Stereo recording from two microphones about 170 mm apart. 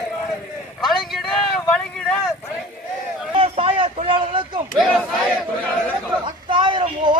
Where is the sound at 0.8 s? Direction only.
Centre (ahead or behind).